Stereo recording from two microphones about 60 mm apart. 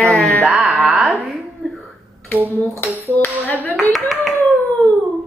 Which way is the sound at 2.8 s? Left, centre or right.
Left.